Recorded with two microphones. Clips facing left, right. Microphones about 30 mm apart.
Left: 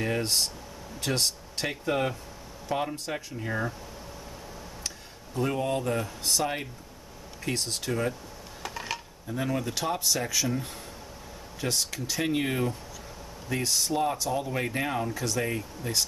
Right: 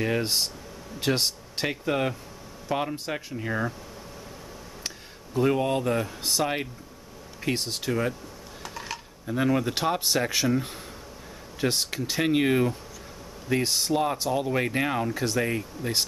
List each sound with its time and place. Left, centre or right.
0.0 s speech: centre
4.8 s speech: centre
8.6 s a sound: centre
9.3 s speech: right
9.8 s speech: right; by 15.9 s centre